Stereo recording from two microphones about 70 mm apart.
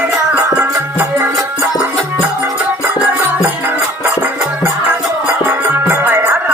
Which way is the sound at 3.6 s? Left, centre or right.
Right.